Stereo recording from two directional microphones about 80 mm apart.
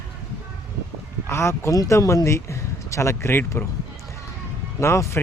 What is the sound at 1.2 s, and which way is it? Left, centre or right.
Speech, left.